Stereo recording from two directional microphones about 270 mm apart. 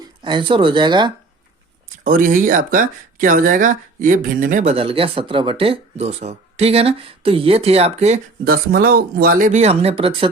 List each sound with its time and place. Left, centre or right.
0.0 s speech: centre
2.0 s speech: right